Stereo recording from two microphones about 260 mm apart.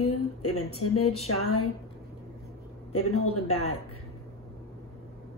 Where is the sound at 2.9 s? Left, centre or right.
Left.